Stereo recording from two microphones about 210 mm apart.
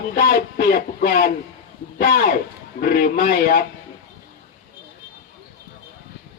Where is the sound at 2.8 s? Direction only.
45° left (ahead or behind).